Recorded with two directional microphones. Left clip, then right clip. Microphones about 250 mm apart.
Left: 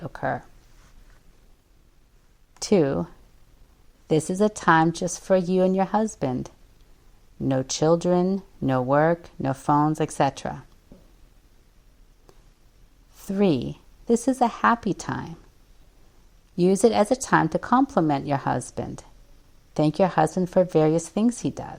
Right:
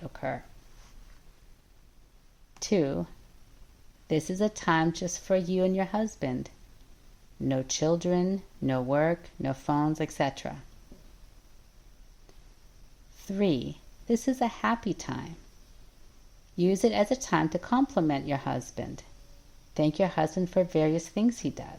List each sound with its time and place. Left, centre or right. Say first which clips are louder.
0.0 s a sound: left 7 dB; left
2.6 s speech: left 7 dB; left
13.1 s a woman's voice: left 6 dB; left
16.6 s speech: left 6 dB; left